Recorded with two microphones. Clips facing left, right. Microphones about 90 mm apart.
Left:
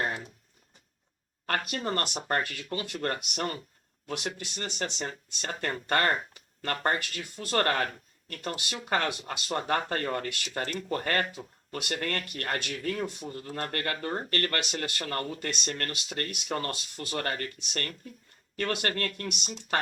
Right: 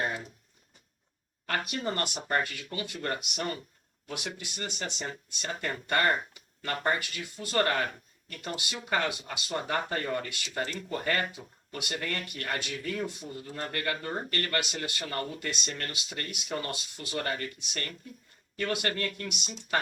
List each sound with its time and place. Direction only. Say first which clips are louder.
1.5 s speech: left 1 dB; 55° left (ahead or behind)